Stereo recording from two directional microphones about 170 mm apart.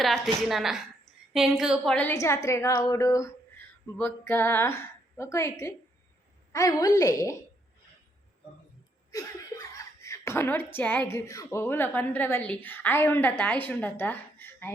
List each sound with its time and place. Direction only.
0.0 s a woman's voice: centre (ahead or behind); by 7.3 s 20° left (ahead or behind)
9.1 s a woman's voice: 20° left (ahead or behind)